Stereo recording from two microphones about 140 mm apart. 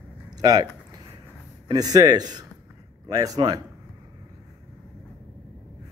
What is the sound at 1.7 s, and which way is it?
A man's voice, 25° right (ahead or behind).